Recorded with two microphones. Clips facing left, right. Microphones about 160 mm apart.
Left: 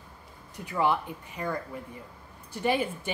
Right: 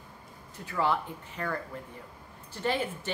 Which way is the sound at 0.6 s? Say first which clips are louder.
Left 2 dB; 15° left (ahead or behind).